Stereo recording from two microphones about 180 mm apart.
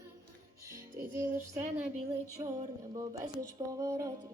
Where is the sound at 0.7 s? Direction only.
15° right (ahead or behind).